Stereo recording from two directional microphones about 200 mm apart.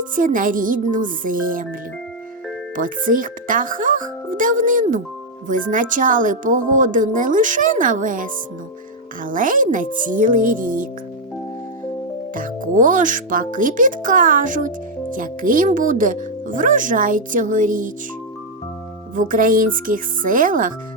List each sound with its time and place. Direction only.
0.2 s speech: 40° right (ahead or behind)
2.7 s speech: 40° right (ahead or behind)
12.3 s speech: 40° right (ahead or behind)
19.1 s speech: 40° right (ahead or behind)